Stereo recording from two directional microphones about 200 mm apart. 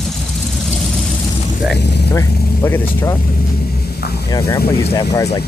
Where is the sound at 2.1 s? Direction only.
15° left (ahead or behind).